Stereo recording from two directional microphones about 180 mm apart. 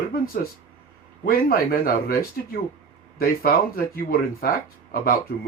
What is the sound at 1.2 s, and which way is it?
Speech, 55° left (ahead or behind).